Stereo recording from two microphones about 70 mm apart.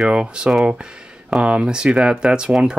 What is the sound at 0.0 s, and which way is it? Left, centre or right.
Speech, centre.